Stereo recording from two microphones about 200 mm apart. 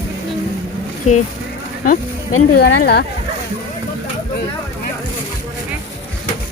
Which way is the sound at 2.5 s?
50° left (ahead or behind).